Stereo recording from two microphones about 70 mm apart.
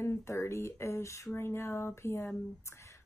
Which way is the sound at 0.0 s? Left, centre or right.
Left.